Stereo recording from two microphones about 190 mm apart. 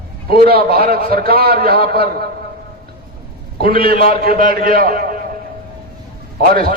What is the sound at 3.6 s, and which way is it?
A man's voice, 50° right (ahead or behind).